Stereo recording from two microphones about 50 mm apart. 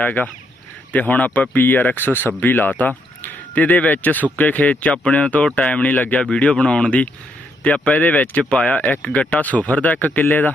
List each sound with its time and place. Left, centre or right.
0.0 s speech: left